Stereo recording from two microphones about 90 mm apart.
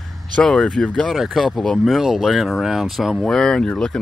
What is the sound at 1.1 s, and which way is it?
Speech, 5° right (ahead or behind).